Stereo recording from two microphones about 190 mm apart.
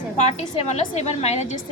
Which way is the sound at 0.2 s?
35° left (ahead or behind).